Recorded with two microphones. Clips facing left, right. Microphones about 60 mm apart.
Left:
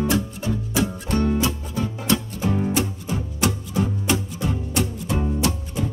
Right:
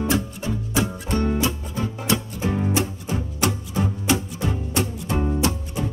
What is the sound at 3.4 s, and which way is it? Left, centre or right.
Music, right.